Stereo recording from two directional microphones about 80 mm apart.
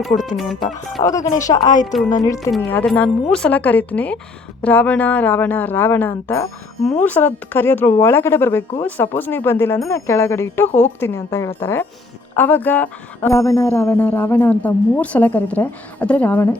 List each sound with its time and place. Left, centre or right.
0.0 s speech: centre
1.0 s speech: left
1.5 s a woman's voice: left
2.8 s a woman's voice: centre; by 11.9 s left
12.4 s a woman's voice: left
13.2 s speech: left
13.6 s a woman's voice: left